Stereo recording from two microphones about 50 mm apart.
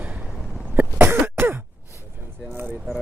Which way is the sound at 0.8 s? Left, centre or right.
Right.